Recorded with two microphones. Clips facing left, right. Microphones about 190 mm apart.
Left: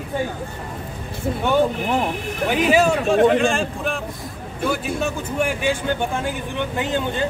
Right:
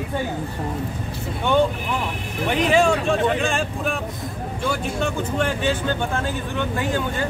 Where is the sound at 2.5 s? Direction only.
5° left (ahead or behind).